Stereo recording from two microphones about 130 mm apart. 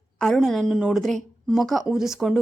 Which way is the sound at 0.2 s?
5° left (ahead or behind).